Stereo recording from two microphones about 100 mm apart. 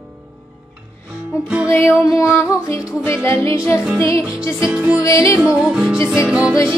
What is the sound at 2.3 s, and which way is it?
Music, 25° left (ahead or behind).